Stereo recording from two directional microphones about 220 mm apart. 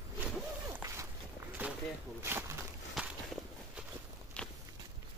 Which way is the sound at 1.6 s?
5° right (ahead or behind).